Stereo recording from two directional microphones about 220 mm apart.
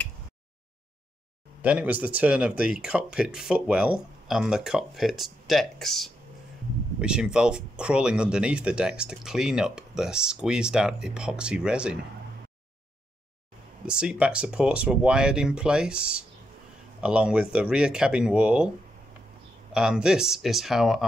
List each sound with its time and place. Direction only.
1.6 s speech: 5° right (ahead or behind)
13.8 s speech: 5° right (ahead or behind)
19.7 s speech: 5° right (ahead or behind)